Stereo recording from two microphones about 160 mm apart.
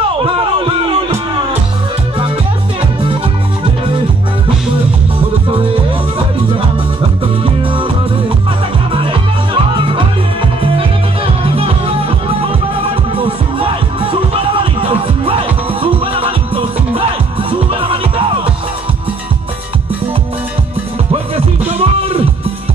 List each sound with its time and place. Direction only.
0.2 s a sound: 30° right (ahead or behind)
7.6 s music: 35° right (ahead or behind)
8.9 s music: 30° right (ahead or behind)
11.4 s music: 35° right (ahead or behind)
13.1 s music: 35° right (ahead or behind)
21.4 s music: 40° right (ahead or behind)